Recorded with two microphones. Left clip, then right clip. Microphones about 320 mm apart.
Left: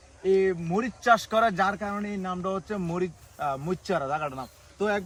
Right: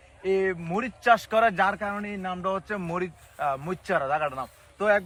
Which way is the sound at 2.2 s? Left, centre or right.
Centre.